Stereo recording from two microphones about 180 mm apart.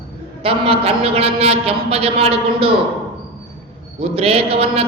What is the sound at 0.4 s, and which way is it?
A man's voice, 30° right (ahead or behind).